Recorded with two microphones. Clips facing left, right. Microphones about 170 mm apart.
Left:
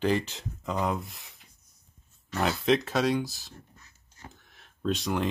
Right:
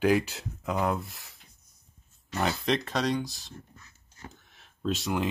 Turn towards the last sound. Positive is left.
turn(degrees=-5)  # may be behind; listen again after turning